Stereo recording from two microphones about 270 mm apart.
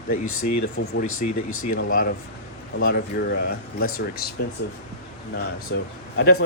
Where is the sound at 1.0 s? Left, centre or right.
Left.